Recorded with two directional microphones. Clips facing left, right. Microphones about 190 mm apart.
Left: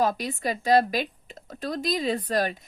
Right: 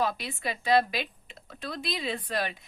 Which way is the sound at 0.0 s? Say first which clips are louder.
Left 5 dB; 40° left (ahead or behind).